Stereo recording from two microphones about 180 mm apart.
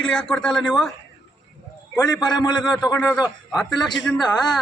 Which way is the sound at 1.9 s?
20° left (ahead or behind).